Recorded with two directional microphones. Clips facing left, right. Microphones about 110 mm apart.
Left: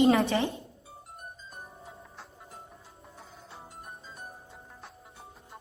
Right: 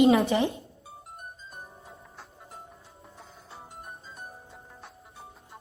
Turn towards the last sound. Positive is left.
turn(degrees=0)  # may be behind; listen again after turning